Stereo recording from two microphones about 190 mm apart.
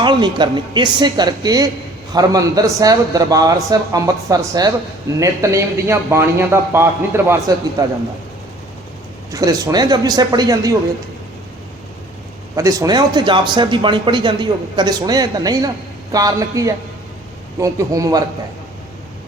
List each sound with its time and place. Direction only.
0.0 s a man's voice: 25° right (ahead or behind)
9.3 s speech: 20° right (ahead or behind)
12.5 s a man's voice: 20° right (ahead or behind)